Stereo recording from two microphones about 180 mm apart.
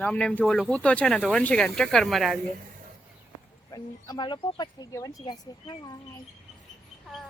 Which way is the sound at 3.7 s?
25° left (ahead or behind).